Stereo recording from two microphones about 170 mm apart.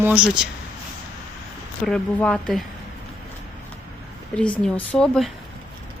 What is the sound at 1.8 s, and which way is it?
Speech, 5° left (ahead or behind).